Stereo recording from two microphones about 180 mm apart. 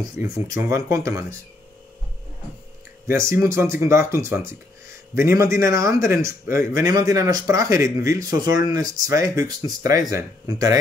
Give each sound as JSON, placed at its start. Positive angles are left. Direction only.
{"t": 0.2, "sound": "speech", "side_deg": -15}
{"t": 3.1, "sound": "speech", "side_deg": -15}